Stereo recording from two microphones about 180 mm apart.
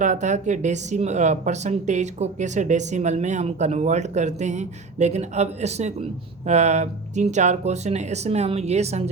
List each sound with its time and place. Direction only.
0.0 s speech: 40° right (ahead or behind)